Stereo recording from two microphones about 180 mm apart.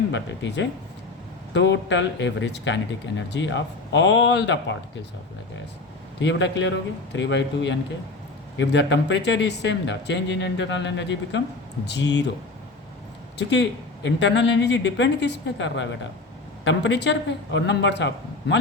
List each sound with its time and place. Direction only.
0.1 s speech: 85° left
6.1 s speech: 80° left
11.9 s speech: 75° left (ahead or behind)
13.5 s speech: 75° left (ahead or behind)